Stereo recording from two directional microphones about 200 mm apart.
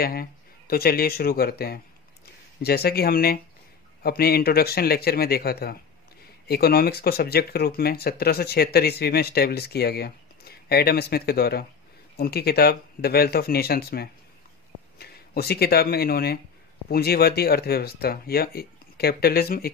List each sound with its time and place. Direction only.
0.0 s speech: 50° left (ahead or behind)